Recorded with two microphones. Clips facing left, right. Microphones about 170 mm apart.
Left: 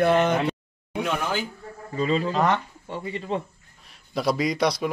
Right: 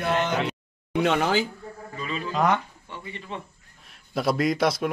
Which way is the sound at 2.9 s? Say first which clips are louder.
Left 9 dB; 35° left (ahead or behind).